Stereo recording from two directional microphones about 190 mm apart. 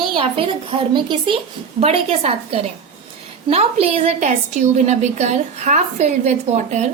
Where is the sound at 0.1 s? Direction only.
30° right (ahead or behind).